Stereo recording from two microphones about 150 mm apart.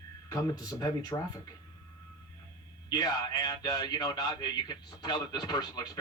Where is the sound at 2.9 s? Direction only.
25° left (ahead or behind).